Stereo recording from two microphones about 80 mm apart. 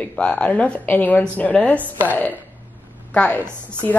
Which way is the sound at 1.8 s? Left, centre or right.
Right.